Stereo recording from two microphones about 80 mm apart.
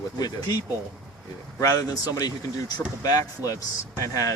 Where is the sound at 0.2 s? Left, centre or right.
Left.